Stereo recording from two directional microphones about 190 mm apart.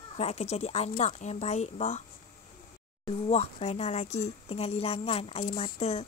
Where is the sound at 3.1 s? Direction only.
30° left (ahead or behind).